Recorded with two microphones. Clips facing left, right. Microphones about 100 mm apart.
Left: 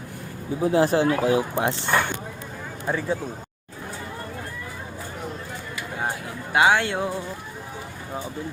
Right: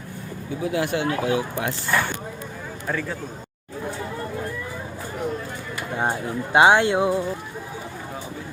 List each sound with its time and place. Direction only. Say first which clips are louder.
0.6 s speech: left 5 dB; 35° left (ahead or behind); by 3.2 s 20° left (ahead or behind)
6.0 s speech: right 5 dB; 25° right (ahead or behind)